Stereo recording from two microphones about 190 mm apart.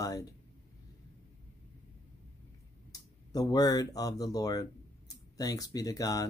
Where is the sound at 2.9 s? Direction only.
20° left (ahead or behind).